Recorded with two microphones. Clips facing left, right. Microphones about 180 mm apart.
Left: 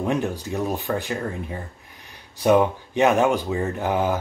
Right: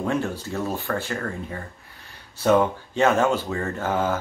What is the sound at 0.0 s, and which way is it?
Speech, 15° left (ahead or behind).